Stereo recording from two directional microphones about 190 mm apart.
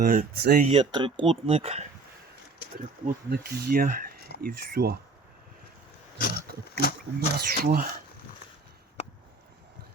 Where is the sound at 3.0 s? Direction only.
55° right (ahead or behind).